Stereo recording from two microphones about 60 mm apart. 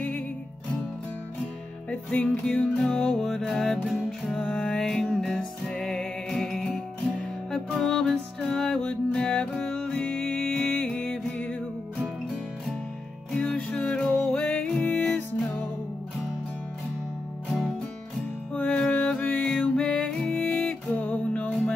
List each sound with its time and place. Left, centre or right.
1.9 s music: left
13.4 s music: left
18.5 s music: centre